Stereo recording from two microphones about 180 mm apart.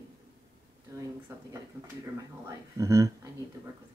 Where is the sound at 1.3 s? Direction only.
15° right (ahead or behind).